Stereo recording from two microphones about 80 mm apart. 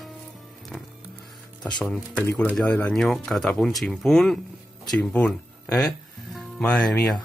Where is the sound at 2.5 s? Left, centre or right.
Centre.